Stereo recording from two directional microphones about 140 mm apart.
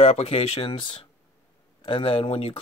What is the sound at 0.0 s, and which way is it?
Speech, 45° left (ahead or behind).